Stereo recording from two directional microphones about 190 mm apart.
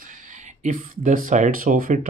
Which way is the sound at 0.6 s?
45° right (ahead or behind).